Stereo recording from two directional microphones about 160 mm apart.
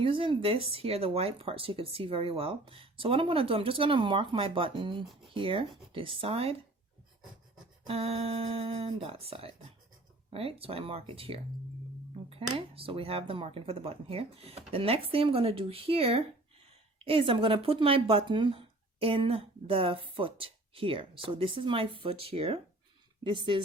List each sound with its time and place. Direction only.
0.0 s speech: 35° right (ahead or behind)
7.9 s speech: 40° right (ahead or behind)